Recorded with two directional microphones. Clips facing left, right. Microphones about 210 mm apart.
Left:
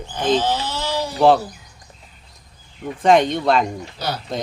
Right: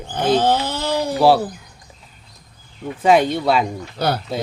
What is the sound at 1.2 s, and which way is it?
Speech, 5° right (ahead or behind).